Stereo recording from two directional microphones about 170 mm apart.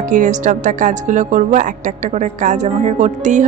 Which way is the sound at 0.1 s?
45° right (ahead or behind).